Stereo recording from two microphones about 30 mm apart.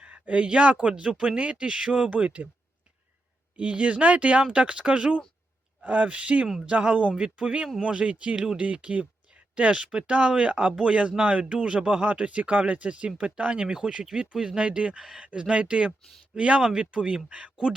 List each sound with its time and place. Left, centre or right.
0.0 s speech: right
1.4 s speech: right
3.6 s speech: right
5.8 s speech: right
7.2 s speech: right
11.8 s speech: right
12.0 s speech: right
14.0 s speech: right
14.9 s speech: centre
15.2 s speech: right